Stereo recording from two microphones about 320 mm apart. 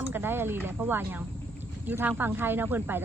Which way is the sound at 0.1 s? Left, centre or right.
Centre.